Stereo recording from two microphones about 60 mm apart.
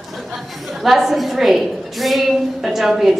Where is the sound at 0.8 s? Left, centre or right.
Centre.